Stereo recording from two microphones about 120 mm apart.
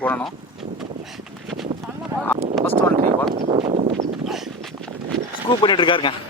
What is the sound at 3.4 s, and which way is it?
Speech, 60° right (ahead or behind).